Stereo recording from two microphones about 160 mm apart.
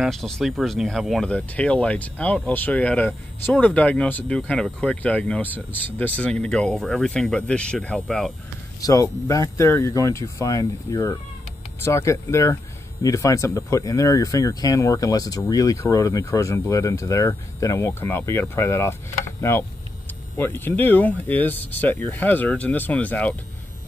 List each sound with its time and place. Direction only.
0.0 s speech: centre (ahead or behind)
8.8 s speech: 20° left (ahead or behind)